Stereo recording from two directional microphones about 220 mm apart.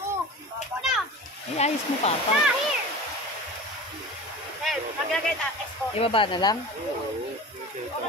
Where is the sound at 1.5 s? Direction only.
30° left (ahead or behind).